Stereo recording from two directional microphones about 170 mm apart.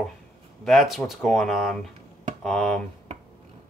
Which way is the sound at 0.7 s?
Centre (ahead or behind).